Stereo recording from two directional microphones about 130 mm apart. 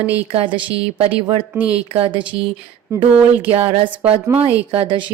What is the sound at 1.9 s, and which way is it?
Speech, 45° right (ahead or behind).